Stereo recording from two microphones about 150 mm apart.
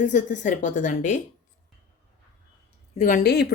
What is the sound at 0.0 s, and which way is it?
A woman's voice, 55° left (ahead or behind).